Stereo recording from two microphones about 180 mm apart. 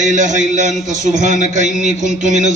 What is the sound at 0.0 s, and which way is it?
Music, 45° right (ahead or behind).